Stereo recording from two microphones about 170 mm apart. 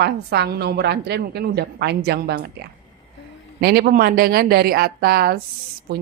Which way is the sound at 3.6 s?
70° right (ahead or behind).